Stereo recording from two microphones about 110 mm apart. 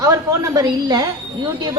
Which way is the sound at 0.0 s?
35° right (ahead or behind).